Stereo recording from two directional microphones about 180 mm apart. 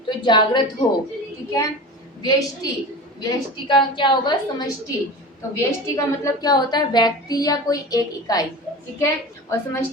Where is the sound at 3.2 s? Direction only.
25° left (ahead or behind).